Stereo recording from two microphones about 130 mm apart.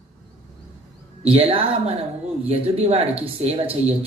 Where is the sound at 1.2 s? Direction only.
45° right (ahead or behind).